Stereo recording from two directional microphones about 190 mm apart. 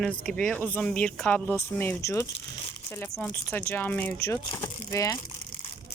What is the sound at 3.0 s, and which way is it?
Speech, centre (ahead or behind).